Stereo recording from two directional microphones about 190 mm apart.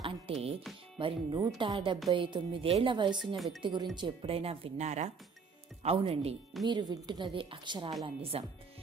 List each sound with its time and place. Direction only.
0.0 s music: 30° right (ahead or behind)
0.9 s a woman's voice: 25° right (ahead or behind)
3.3 s speech: centre (ahead or behind)
3.9 s a woman's voice: 25° right (ahead or behind)